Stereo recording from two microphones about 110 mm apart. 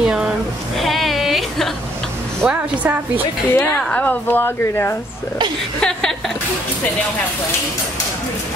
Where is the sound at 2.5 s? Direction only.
15° right (ahead or behind).